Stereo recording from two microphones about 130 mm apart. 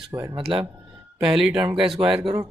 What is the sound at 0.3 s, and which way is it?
Speech, 45° right (ahead or behind).